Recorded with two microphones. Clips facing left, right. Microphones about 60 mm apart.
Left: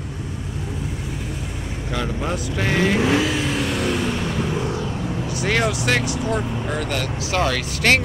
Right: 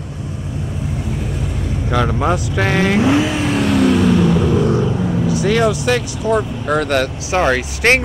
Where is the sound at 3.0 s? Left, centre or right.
Centre.